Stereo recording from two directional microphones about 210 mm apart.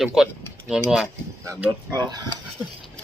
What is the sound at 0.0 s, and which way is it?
Speech, centre (ahead or behind).